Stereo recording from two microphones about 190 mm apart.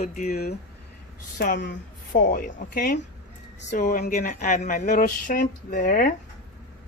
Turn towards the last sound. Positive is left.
turn(degrees=45)  # may be behind; listen again after turning